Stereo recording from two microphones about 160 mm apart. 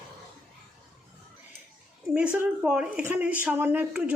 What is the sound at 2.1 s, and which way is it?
Speech, 10° right (ahead or behind).